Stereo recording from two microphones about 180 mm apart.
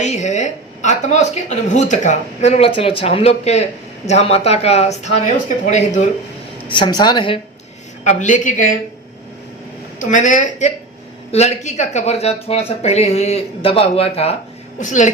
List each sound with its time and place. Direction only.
0.0 s a woman's voice: 40° left (ahead or behind)
6.7 s a woman's voice: 25° left (ahead or behind)
8.0 s speech: 45° left (ahead or behind)
10.0 s a woman's voice: 45° left (ahead or behind)
14.8 s speech: 45° left (ahead or behind)